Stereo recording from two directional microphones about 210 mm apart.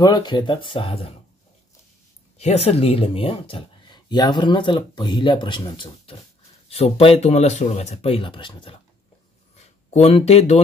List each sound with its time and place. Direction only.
0.0 s speech: 20° left (ahead or behind)
2.3 s speech: 30° left (ahead or behind)
9.9 s speech: 30° left (ahead or behind)